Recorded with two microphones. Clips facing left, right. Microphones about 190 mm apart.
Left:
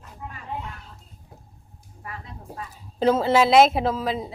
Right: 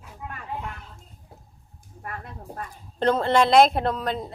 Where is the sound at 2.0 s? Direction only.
55° right (ahead or behind).